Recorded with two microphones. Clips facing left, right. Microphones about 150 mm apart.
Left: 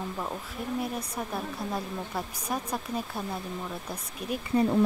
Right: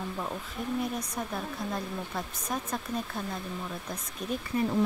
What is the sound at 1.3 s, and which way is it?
Speech, 10° left (ahead or behind).